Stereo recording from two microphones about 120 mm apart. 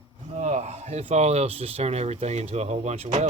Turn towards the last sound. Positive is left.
turn(degrees=-65)  # may be behind; listen again after turning